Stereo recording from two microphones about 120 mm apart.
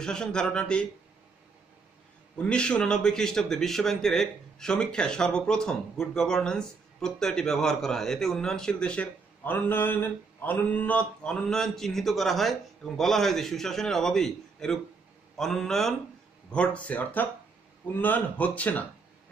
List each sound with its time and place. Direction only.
0.0 s speech: 5° left (ahead or behind)
2.3 s a man's voice: 10° left (ahead or behind)